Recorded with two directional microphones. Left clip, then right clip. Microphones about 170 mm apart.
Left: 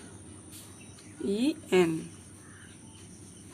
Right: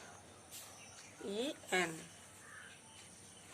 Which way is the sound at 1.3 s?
25° left (ahead or behind).